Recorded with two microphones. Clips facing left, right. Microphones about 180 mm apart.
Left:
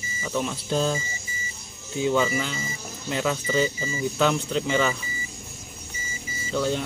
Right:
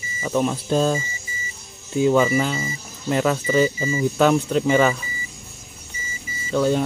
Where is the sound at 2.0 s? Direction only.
45° right (ahead or behind).